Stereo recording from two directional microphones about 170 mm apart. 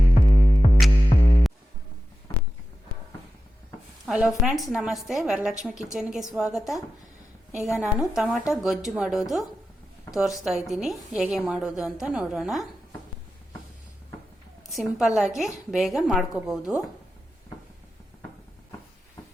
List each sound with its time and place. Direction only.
0.1 s music: 50° left (ahead or behind)
1.1 s music: 35° left (ahead or behind)
4.0 s a woman's voice: 5° right (ahead or behind)
7.5 s a woman's voice: 15° left (ahead or behind)
7.8 s a woman's voice: 5° right (ahead or behind)
14.8 s a woman's voice: 5° right (ahead or behind)